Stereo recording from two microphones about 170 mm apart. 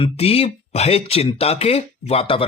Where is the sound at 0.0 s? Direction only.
35° left (ahead or behind).